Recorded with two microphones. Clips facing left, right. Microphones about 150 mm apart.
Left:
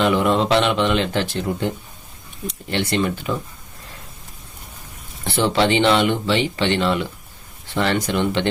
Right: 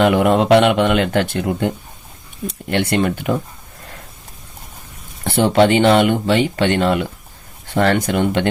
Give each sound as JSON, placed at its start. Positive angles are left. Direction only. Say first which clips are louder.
{"t": 0.0, "sound": "speech", "louder": "right 4 dB", "side_deg": -55}
{"t": 5.2, "sound": "speech", "louder": "right 5 dB", "side_deg": -50}